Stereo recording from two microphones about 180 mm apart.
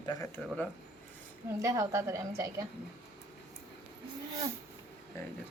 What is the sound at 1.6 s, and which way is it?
A woman's voice, 15° right (ahead or behind).